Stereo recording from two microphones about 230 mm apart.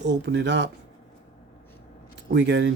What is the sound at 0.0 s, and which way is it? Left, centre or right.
Speech, right.